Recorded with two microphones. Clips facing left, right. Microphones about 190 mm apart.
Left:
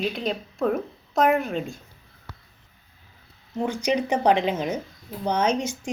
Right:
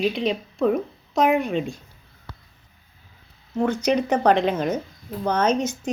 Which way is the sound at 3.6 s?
15° left (ahead or behind).